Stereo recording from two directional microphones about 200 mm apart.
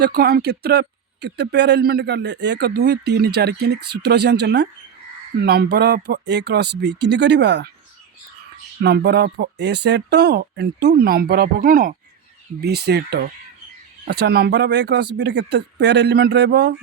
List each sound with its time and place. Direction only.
0.0 s speech: 50° right (ahead or behind)
8.8 s speech: 55° right (ahead or behind)